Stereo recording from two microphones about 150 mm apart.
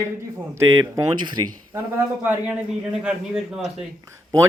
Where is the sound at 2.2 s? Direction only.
10° right (ahead or behind).